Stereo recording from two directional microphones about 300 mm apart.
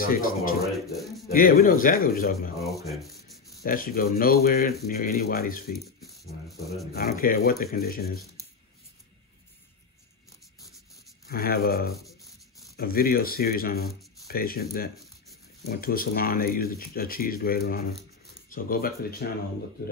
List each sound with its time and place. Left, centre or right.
0.0 s speech: left
0.9 s speech: centre
1.3 s speech: left
2.9 s rub: centre
3.6 s speech: left
5.8 s speech: centre
6.9 s speech: left
11.2 s speech: left
11.9 s speech: centre
12.7 s speech: left